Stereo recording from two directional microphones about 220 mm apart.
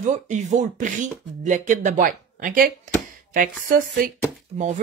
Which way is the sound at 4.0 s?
40° right (ahead or behind).